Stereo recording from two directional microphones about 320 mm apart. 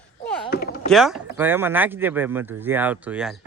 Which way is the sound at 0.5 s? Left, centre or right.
Left.